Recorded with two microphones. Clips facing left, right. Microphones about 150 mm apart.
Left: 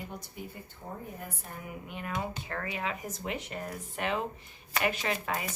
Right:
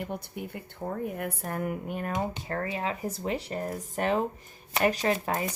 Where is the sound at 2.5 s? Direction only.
35° right (ahead or behind).